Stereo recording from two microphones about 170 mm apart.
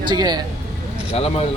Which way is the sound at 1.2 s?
35° left (ahead or behind).